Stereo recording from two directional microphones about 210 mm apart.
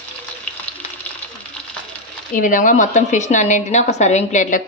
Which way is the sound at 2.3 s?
40° left (ahead or behind).